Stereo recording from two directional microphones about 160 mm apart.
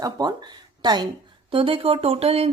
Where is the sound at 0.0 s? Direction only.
25° right (ahead or behind).